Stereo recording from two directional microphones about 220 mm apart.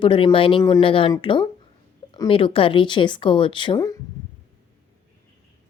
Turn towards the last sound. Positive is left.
turn(degrees=15)  # may be behind; listen again after turning